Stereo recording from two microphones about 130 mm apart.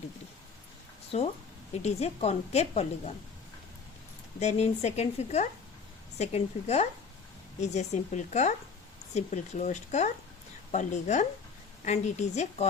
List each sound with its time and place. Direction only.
1.8 s a woman's voice: 55° left (ahead or behind)
4.4 s a woman's voice: 55° left (ahead or behind)